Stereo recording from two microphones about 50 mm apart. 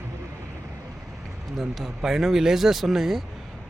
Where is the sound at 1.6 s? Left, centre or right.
Centre.